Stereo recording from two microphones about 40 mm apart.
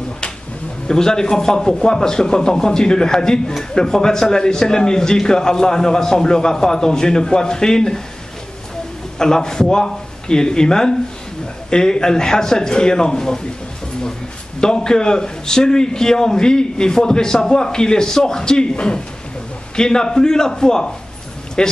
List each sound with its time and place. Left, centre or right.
0.8 s a man's voice: centre
9.2 s a man's voice: centre
14.6 s a man's voice: centre